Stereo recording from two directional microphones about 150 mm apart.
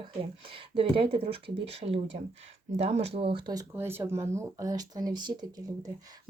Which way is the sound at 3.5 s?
20° right (ahead or behind).